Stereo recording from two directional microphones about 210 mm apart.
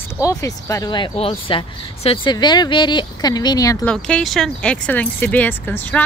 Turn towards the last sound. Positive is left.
turn(degrees=10)  # may be behind; listen again after turning